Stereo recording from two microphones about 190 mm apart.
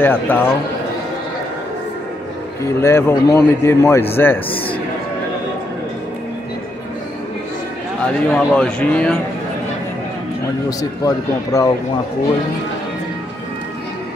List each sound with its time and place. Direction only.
0.0 s a man's voice: 10° left (ahead or behind)
2.8 s a man's voice: 15° left (ahead or behind)
4.5 s speech: 30° left (ahead or behind)
8.0 s a man's voice: 5° left (ahead or behind)
10.8 s a man's voice: 15° left (ahead or behind)